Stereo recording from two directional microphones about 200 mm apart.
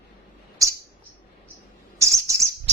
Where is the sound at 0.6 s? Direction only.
15° right (ahead or behind).